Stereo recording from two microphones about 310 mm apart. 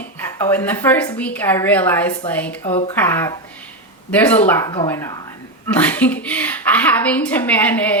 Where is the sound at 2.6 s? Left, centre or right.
Centre.